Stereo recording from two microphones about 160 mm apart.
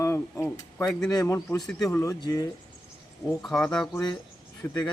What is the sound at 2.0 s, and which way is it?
Speech, 20° left (ahead or behind).